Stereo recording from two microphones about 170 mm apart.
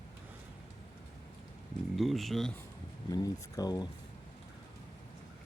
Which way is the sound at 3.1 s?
20° left (ahead or behind).